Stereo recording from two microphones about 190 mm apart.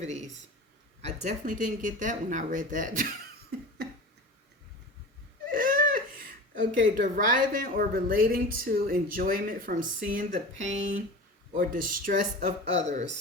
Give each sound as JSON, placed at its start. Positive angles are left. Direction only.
{"t": 0.0, "sound": "speech", "side_deg": -35}
{"t": 5.5, "sound": "speech", "side_deg": -45}